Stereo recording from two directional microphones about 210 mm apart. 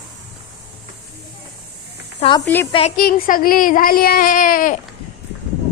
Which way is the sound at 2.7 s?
30° left (ahead or behind).